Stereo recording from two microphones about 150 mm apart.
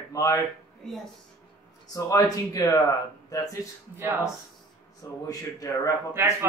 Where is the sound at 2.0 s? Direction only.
25° left (ahead or behind).